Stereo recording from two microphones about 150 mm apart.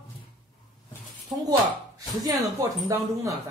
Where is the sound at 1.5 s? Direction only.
25° right (ahead or behind).